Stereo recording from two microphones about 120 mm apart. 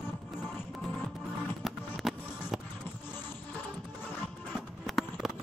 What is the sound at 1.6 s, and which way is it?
Music, centre (ahead or behind).